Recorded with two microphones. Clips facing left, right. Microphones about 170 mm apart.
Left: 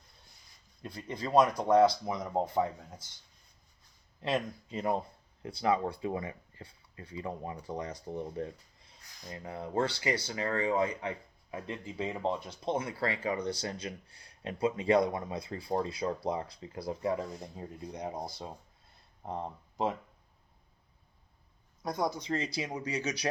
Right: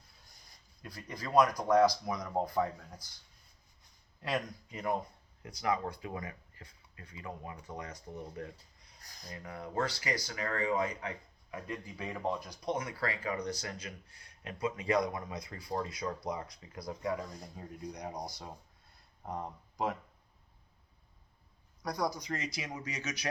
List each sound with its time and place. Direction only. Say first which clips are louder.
0.8 s speech: left 5 dB; 25° left (ahead or behind)
4.2 s speech: left 3 dB; 25° left (ahead or behind)
21.8 s speech: left 2 dB; 25° left (ahead or behind)